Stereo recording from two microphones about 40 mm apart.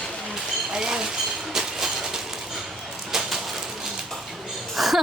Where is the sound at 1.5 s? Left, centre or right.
Centre.